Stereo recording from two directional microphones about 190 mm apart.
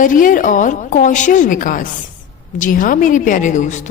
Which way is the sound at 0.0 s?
45° left (ahead or behind).